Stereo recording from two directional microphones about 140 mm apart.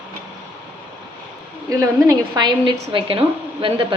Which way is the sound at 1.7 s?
25° right (ahead or behind).